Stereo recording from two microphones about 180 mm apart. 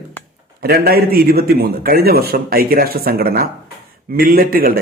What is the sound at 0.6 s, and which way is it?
Speech, 60° right (ahead or behind).